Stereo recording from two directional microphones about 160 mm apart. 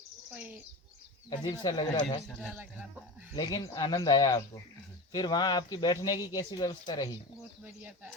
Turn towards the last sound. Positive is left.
turn(degrees=25)  # may be behind; listen again after turning